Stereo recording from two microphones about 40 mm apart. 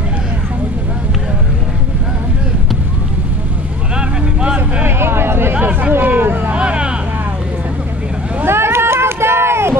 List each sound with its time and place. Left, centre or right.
3.9 s vehicle: right
4.8 s a sound: right
5.7 s a sound: right
5.9 s hubbub: right
6.5 s vehicle: right
8.5 s run: right